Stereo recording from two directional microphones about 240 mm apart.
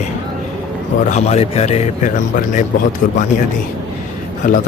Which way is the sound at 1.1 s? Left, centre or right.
Left.